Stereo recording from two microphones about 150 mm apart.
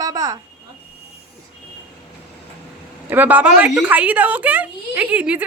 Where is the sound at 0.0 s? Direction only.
25° right (ahead or behind).